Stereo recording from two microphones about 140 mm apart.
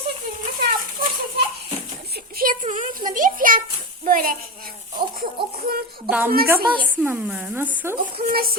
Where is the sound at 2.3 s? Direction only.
85° right.